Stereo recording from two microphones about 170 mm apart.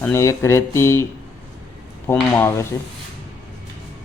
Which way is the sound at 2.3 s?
15° left (ahead or behind).